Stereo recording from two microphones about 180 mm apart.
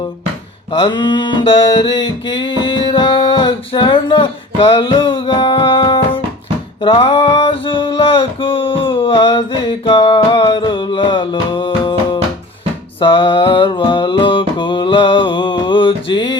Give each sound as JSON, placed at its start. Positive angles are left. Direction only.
{"t": 0.9, "sound": "music", "side_deg": 25}
{"t": 6.8, "sound": "a sound", "side_deg": 30}
{"t": 13.0, "sound": "mantra", "side_deg": 30}